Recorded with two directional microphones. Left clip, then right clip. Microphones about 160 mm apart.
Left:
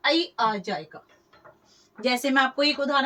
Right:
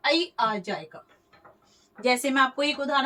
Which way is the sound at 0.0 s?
5° left (ahead or behind).